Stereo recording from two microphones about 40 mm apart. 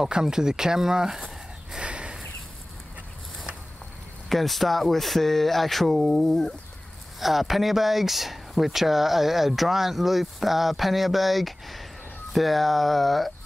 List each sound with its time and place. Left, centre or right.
0.0 s speech: centre
1.7 s a sound: right
4.3 s speech: centre